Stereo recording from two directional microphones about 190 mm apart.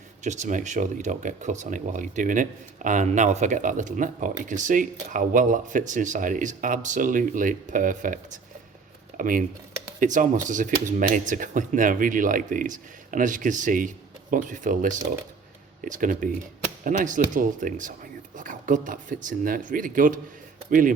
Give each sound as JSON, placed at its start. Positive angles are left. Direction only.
{"t": 0.3, "sound": "speech", "side_deg": -40}